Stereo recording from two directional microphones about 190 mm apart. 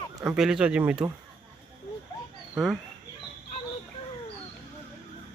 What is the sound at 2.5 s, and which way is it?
Speech, centre (ahead or behind).